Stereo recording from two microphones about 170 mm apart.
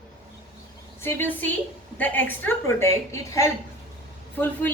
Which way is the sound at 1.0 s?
10° left (ahead or behind).